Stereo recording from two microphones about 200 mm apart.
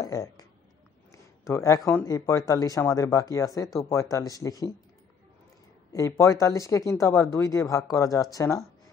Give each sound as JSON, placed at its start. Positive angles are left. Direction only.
{"t": 0.0, "sound": "speech", "side_deg": 15}
{"t": 1.5, "sound": "speech", "side_deg": 15}
{"t": 5.9, "sound": "speech", "side_deg": 15}